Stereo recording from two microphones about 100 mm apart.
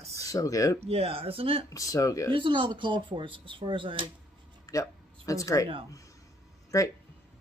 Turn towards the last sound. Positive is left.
turn(degrees=35)  # may be behind; listen again after turning